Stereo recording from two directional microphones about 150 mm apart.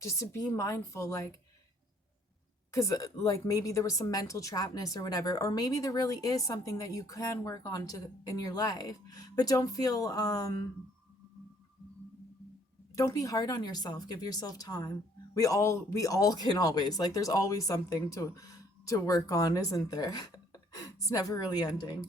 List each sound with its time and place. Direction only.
0.0 s speech: 20° left (ahead or behind)
2.7 s speech: 20° left (ahead or behind)
13.0 s speech: 20° left (ahead or behind)